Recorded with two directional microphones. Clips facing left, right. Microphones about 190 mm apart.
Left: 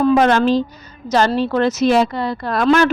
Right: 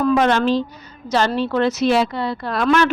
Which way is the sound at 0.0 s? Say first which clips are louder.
Left 3 dB; 35° left (ahead or behind).